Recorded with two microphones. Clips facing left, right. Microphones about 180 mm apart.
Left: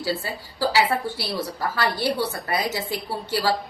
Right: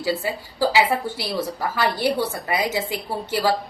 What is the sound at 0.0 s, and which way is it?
A woman's voice, 15° right (ahead or behind).